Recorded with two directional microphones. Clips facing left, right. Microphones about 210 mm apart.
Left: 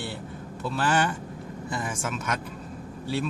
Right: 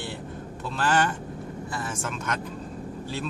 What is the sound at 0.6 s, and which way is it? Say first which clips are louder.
Speech: even; 10° left (ahead or behind).